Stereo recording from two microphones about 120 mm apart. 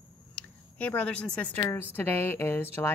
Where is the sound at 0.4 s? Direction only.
15° left (ahead or behind).